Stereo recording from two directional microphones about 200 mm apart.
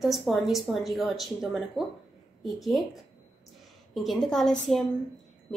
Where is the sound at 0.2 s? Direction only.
Centre (ahead or behind).